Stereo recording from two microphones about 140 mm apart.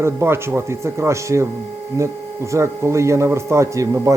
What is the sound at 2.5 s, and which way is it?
A man's voice, 20° right (ahead or behind).